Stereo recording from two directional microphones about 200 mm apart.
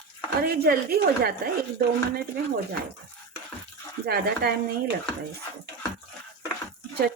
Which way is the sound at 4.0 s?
50° right (ahead or behind).